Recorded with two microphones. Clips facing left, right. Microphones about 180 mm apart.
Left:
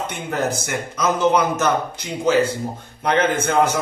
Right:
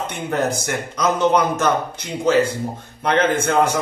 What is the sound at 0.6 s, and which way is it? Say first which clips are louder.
A man's voice: right 1 dB; centre (ahead or behind).